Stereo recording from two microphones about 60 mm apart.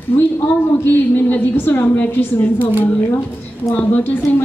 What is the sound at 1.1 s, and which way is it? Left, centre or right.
A woman's voice, left.